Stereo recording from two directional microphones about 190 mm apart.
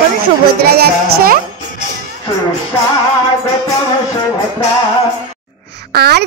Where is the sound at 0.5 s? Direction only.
55° right (ahead or behind).